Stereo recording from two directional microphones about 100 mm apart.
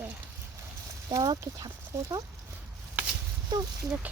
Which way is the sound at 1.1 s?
40° right (ahead or behind).